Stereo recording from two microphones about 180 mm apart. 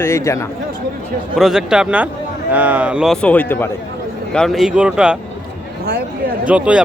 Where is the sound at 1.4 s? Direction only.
5° right (ahead or behind).